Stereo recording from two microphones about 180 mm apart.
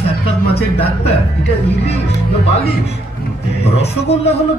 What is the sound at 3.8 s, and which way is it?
Speech, 35° left (ahead or behind).